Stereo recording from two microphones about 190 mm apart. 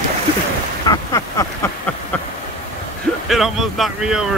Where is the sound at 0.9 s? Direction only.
20° left (ahead or behind).